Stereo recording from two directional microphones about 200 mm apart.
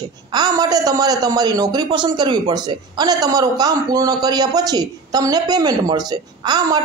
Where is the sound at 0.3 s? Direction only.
20° right (ahead or behind).